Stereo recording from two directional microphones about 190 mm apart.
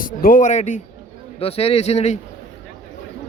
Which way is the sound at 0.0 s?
50° left (ahead or behind).